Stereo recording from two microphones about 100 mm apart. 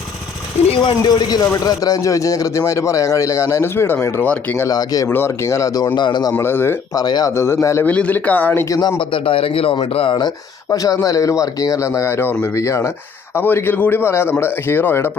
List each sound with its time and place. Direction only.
0.8 s a man's voice: 45° left (ahead or behind); by 4.7 s 20° left (ahead or behind)
4.7 s a man's voice: 40° left (ahead or behind)
5.0 s a man's voice: 25° left (ahead or behind); by 6.3 s 50° left (ahead or behind)
6.3 s a man's voice: 25° left (ahead or behind)
6.9 s a man's voice: 40° left (ahead or behind)
7.3 s a man's voice: 25° left (ahead or behind)
7.9 s speech: 15° left (ahead or behind)
8.7 s a man's voice: 35° left (ahead or behind)
9.0 s a man's voice: 60° left (ahead or behind)
10.7 s a man's voice: 40° left (ahead or behind); by 15.1 s 20° left (ahead or behind)